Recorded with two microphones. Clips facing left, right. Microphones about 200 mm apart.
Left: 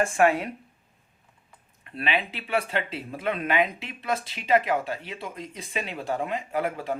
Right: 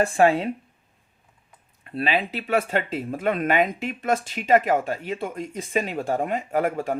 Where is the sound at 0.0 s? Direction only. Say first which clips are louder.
Right 3 dB; 30° right (ahead or behind).